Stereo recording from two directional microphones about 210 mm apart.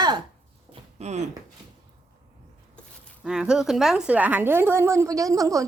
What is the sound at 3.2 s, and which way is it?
A woman's voice, 5° right (ahead or behind).